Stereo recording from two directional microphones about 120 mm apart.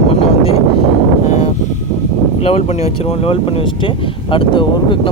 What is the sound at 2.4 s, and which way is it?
Speech, 60° left (ahead or behind).